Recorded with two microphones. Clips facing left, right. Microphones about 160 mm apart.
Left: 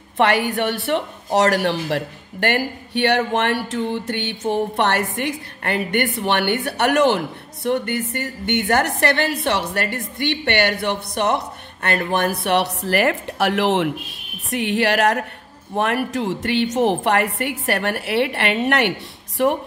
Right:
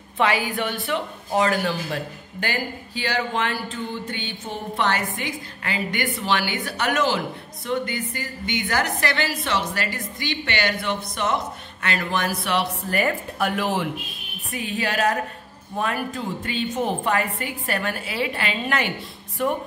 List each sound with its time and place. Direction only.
0.2 s a woman's voice: 70° left (ahead or behind)